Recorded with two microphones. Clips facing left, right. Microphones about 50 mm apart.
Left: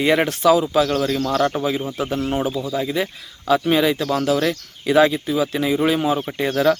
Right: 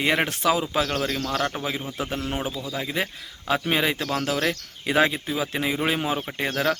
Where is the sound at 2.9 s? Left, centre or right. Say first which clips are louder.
Left 4 dB; right.